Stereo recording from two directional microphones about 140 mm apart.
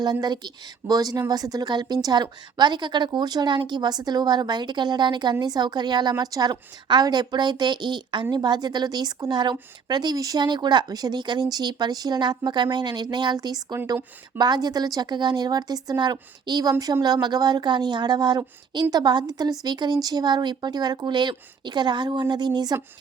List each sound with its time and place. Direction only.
0.0 s a woman's voice: 30° right (ahead or behind)